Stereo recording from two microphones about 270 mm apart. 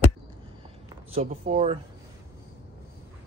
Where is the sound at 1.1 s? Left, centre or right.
Right.